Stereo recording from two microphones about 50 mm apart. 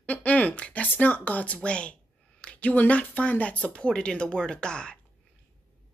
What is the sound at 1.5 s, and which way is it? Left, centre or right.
Speech, left.